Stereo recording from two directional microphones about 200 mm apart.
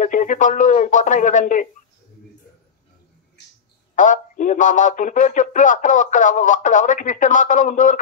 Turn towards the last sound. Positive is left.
turn(degrees=40)  # may be behind; listen again after turning